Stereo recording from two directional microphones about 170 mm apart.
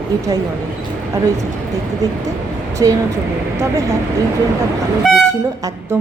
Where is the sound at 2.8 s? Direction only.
20° right (ahead or behind).